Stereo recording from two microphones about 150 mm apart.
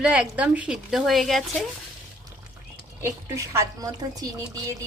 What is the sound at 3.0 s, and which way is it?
Speech, 20° right (ahead or behind).